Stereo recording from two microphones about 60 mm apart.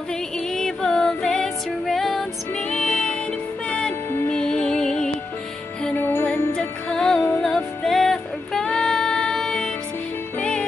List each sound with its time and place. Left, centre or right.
0.6 s music: centre
2.7 s music: centre
4.3 s music: centre
5.9 s music: left
6.5 s music: centre
8.6 s music: centre